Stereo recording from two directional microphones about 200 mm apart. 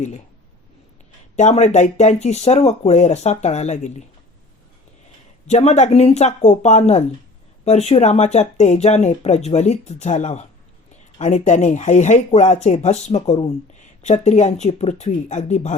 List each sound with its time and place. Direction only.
1.4 s speech: 35° left (ahead or behind)
5.5 s speech: 35° left (ahead or behind)